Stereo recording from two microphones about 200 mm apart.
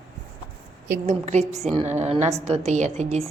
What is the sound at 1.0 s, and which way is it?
A woman's voice, 35° right (ahead or behind).